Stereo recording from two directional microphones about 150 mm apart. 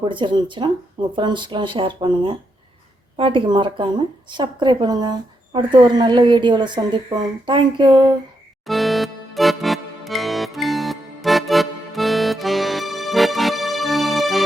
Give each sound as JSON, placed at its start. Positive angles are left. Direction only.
{"t": 0.0, "sound": "a woman's voice", "side_deg": -35}
{"t": 8.6, "sound": "music", "side_deg": 0}